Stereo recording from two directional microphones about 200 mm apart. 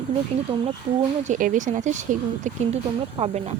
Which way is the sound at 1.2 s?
40° right (ahead or behind).